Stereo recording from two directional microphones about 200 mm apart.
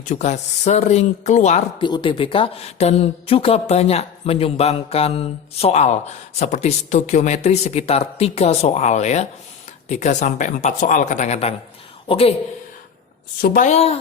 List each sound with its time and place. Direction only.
0.0 s speech: 35° left (ahead or behind)
13.4 s speech: 45° left (ahead or behind)